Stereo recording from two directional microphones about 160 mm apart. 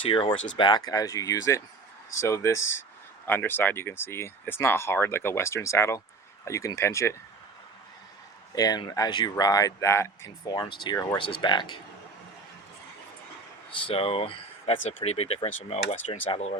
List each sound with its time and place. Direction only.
0.0 s speech: 30° left (ahead or behind)
8.5 s speech: 25° left (ahead or behind)
13.8 s speech: 35° left (ahead or behind)